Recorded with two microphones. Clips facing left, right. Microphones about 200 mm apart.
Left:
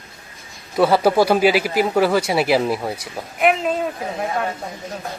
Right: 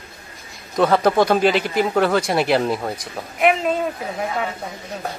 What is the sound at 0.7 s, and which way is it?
Speech, 5° left (ahead or behind).